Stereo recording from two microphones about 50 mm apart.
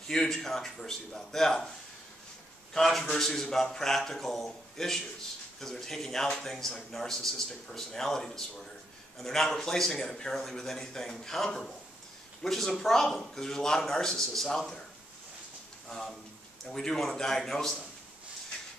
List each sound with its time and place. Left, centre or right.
0.1 s speech: centre
2.7 s speech: centre
15.9 s speech: centre